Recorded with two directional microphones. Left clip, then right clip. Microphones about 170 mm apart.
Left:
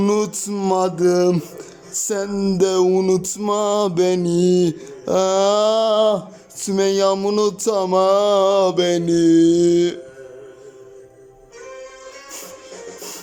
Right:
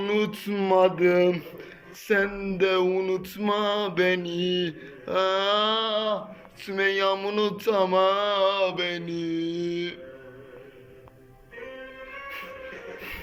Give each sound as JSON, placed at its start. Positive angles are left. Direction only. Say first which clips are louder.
{"t": 0.0, "sound": "music", "louder": "left 7 dB", "side_deg": 30}
{"t": 7.6, "sound": "mantra", "louder": "left 2 dB", "side_deg": 30}